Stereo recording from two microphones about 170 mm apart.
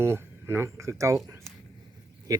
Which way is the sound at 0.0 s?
15° right (ahead or behind).